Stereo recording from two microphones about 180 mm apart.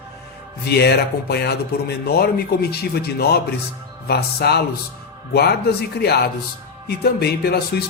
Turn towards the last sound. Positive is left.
turn(degrees=60)  # may be behind; listen again after turning